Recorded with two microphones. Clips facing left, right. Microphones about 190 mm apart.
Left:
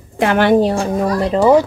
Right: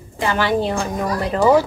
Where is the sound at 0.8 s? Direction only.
25° left (ahead or behind).